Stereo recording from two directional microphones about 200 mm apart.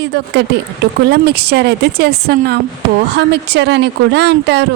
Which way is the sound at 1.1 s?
55° right (ahead or behind).